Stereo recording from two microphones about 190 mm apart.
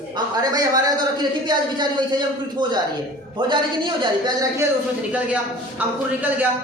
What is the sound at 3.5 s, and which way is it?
A man's voice, 25° right (ahead or behind).